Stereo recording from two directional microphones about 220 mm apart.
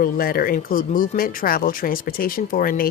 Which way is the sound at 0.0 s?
40° left (ahead or behind).